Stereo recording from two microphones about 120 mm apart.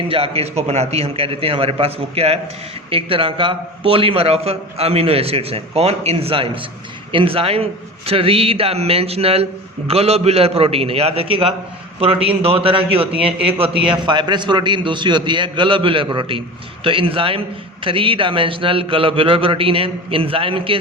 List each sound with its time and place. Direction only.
0.1 s a man's voice: 55° right (ahead or behind)
14.0 s a man's voice: 40° right (ahead or behind)